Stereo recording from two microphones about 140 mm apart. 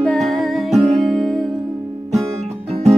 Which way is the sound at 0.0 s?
5° left (ahead or behind).